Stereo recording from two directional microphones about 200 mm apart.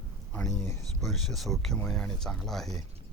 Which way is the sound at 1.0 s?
Centre (ahead or behind).